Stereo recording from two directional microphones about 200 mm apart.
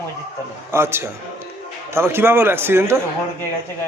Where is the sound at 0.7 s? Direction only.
10° right (ahead or behind).